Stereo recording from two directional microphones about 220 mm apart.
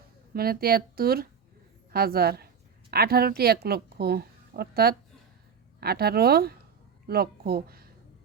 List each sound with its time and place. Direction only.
0.3 s a woman's voice: 45° right (ahead or behind)